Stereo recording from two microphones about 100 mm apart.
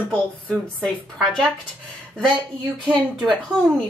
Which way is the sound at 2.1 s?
5° left (ahead or behind).